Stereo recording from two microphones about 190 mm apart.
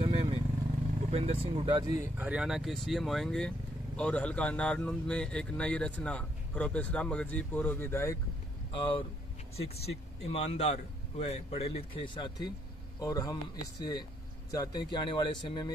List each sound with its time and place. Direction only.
0.1 s vehicle: 20° right (ahead or behind)
1.1 s speech: 30° right (ahead or behind)
2.1 s speech: 5° right (ahead or behind); by 8.2 s 15° left (ahead or behind)
8.7 s speech: 25° left (ahead or behind)